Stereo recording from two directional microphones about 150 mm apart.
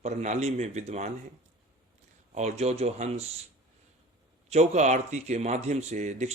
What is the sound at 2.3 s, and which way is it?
Speech, 50° right (ahead or behind).